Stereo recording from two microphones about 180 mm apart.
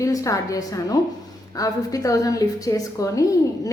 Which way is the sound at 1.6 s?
20° left (ahead or behind).